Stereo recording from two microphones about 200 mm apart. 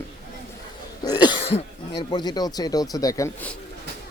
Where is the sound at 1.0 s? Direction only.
20° left (ahead or behind).